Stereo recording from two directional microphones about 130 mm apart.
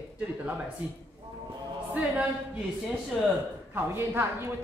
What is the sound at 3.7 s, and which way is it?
Speech, 15° right (ahead or behind).